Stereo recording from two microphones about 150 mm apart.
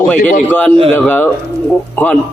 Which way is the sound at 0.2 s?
60° left (ahead or behind).